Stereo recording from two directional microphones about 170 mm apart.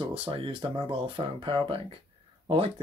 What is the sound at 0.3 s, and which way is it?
Speech, 30° right (ahead or behind).